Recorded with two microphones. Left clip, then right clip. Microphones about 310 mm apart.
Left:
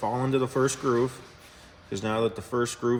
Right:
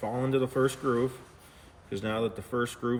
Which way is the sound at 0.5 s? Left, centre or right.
Centre.